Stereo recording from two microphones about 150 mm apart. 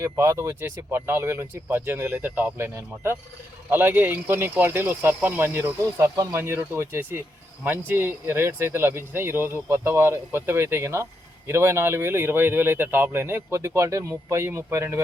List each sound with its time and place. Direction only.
0.0 s speech: 20° right (ahead or behind)